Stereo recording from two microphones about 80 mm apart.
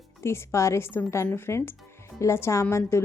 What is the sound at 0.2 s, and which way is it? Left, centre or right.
A woman's voice, left.